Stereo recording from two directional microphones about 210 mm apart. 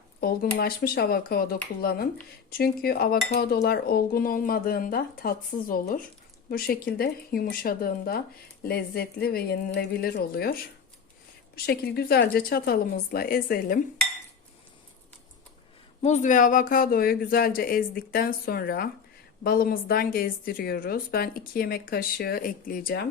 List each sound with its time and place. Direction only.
0.2 s a woman's voice: 45° left (ahead or behind)
11.5 s a woman's voice: 50° left (ahead or behind)
16.0 s a woman's voice: 35° left (ahead or behind)